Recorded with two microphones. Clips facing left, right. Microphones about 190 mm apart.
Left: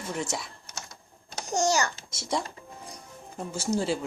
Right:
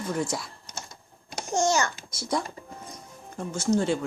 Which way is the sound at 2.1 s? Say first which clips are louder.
Right 5 dB; 25° left (ahead or behind).